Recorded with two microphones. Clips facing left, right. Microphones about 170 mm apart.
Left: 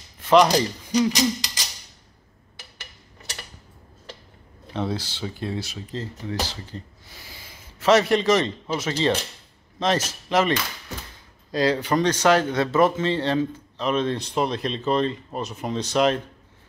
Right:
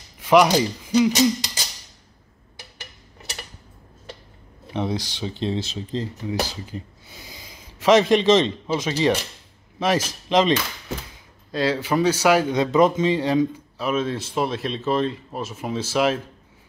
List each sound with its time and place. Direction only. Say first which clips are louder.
0.2 s a sound: right 1 dB; 10° right (ahead or behind)
0.5 s speech: right 2 dB; 5° right (ahead or behind)
4.7 s speech: right 2 dB; 15° right (ahead or behind)
11.5 s speech: even; 5° right (ahead or behind)